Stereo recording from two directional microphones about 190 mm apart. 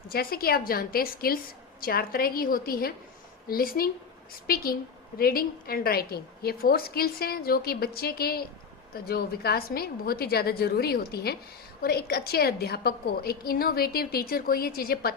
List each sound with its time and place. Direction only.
0.1 s a woman's voice: 50° left (ahead or behind)